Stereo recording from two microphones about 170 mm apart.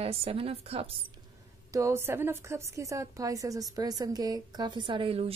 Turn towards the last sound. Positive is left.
turn(degrees=-30)  # may be behind; listen again after turning